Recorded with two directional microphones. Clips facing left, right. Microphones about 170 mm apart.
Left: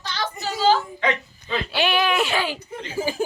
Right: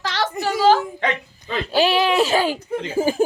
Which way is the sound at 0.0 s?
90° right.